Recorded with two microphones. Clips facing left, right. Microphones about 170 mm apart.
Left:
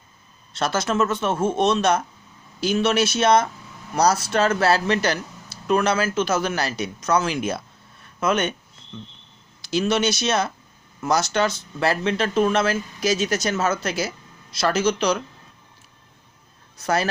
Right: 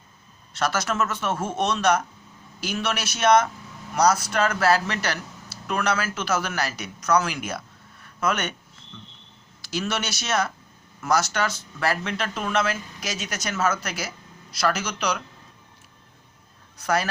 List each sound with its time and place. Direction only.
0.6 s speech: 30° left (ahead or behind)
9.6 s speech: 25° left (ahead or behind)
16.8 s speech: 30° left (ahead or behind)